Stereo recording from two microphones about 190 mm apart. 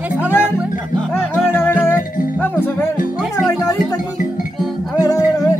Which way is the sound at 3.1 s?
Centre (ahead or behind).